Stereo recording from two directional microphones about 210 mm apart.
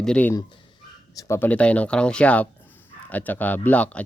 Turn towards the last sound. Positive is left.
turn(degrees=5)  # may be behind; listen again after turning